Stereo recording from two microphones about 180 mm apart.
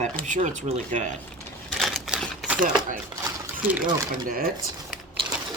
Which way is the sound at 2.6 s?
50° right (ahead or behind).